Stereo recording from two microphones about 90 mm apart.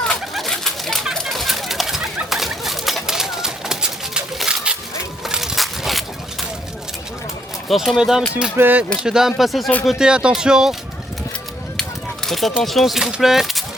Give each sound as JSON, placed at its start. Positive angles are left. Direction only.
{"t": 0.0, "sound": "bird", "side_deg": 5}
{"t": 5.2, "sound": "a sound", "side_deg": -5}
{"t": 7.7, "sound": "speech", "side_deg": 0}
{"t": 8.5, "sound": "speech", "side_deg": -20}
{"t": 9.0, "sound": "speech", "side_deg": -5}
{"t": 10.1, "sound": "speech", "side_deg": -10}
{"t": 11.8, "sound": "a sound", "side_deg": 5}
{"t": 12.6, "sound": "speech", "side_deg": 0}